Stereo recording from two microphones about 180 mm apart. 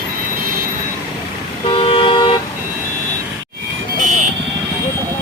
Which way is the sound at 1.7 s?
30° left (ahead or behind).